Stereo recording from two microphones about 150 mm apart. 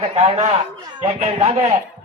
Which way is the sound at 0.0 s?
40° right (ahead or behind).